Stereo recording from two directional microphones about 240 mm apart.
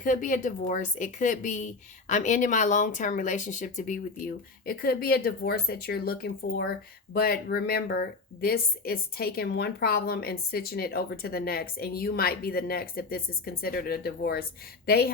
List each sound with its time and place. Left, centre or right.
0.0 s a woman's voice: left